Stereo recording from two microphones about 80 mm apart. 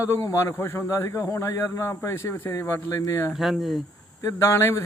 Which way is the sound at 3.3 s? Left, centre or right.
Centre.